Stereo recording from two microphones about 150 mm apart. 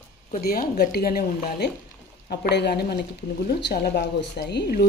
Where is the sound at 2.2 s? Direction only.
90° left.